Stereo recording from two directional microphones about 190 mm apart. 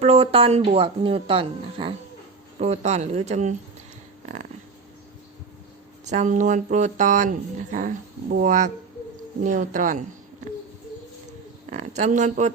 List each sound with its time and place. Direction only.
0.0 s speech: 30° right (ahead or behind)
6.1 s speech: 40° right (ahead or behind)
11.7 s speech: 35° right (ahead or behind)